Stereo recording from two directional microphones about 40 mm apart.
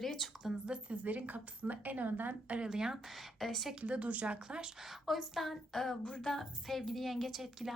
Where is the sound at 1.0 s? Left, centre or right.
Right.